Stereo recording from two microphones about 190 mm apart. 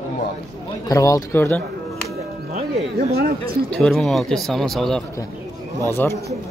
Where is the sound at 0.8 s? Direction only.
20° left (ahead or behind).